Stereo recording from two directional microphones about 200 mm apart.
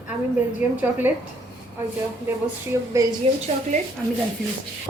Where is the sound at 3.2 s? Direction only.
30° right (ahead or behind).